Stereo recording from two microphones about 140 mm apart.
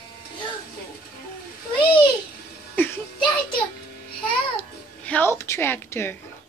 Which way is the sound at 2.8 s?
15° left (ahead or behind).